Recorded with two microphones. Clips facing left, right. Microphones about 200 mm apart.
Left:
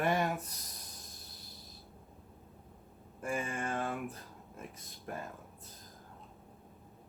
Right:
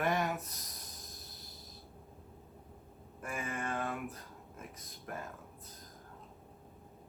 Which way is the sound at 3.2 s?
30° left (ahead or behind).